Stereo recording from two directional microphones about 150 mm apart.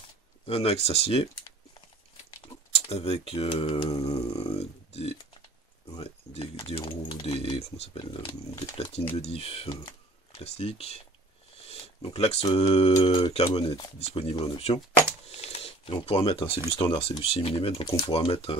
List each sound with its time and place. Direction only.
0.5 s speech: 40° left (ahead or behind)
2.4 s a sound: 40° left (ahead or behind)
5.9 s speech: 40° left (ahead or behind)
11.6 s a sound: 40° left (ahead or behind)
12.4 s speech: 35° left (ahead or behind)
17.8 s speech: 25° left (ahead or behind)
18.1 s speech: 40° left (ahead or behind)